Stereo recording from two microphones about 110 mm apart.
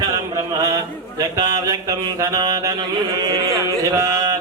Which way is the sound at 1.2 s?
30° right (ahead or behind).